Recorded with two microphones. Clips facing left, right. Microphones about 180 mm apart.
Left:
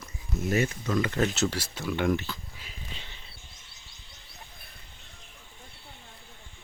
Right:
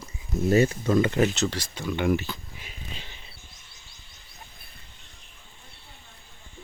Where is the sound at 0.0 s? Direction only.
30° right (ahead or behind).